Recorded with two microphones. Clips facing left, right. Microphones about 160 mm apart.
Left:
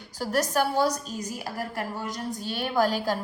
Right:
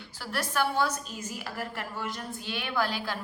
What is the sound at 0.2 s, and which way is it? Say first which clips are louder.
A woman's voice: left 5 dB; 40° left (ahead or behind).